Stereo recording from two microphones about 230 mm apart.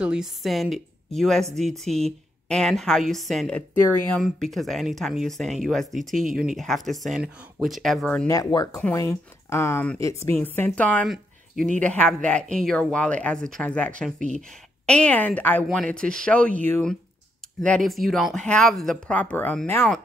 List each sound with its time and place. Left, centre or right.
0.0 s speech: centre
6.1 s speech: right
6.5 s speech: centre
8.8 s speech: centre